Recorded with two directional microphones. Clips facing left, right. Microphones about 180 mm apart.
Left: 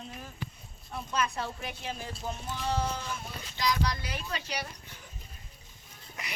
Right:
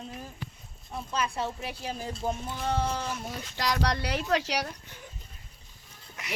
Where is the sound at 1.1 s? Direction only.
30° right (ahead or behind).